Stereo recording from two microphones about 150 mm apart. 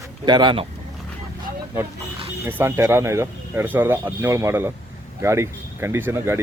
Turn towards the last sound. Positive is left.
turn(degrees=-15)  # may be behind; listen again after turning